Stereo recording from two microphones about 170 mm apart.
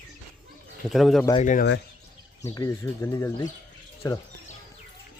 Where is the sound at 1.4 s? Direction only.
45° left (ahead or behind).